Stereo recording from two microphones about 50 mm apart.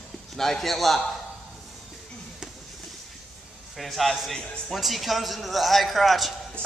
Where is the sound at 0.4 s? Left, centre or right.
Centre.